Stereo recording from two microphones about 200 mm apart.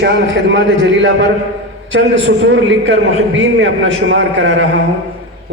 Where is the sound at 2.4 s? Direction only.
70° right (ahead or behind).